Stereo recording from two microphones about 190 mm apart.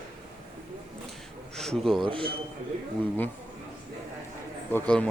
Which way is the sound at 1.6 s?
Centre (ahead or behind).